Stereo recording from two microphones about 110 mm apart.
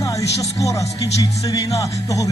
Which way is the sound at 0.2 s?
30° left (ahead or behind).